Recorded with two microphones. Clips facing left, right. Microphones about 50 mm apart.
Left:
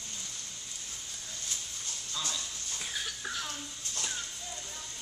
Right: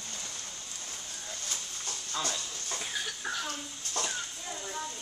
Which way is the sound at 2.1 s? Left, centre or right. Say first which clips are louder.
Right 3 dB; right.